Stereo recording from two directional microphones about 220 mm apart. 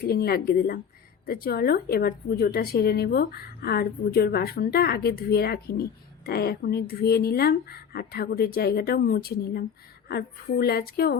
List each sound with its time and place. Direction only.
0.0 s a woman's voice: 45° left (ahead or behind)